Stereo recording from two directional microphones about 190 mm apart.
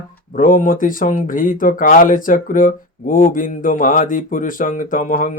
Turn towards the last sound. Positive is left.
turn(degrees=45)  # may be behind; listen again after turning